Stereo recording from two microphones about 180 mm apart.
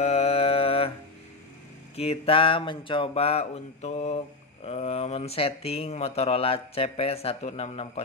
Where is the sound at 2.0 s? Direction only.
30° left (ahead or behind).